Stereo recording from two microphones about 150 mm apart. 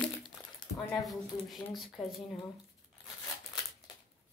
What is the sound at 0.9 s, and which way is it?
Speech, centre (ahead or behind).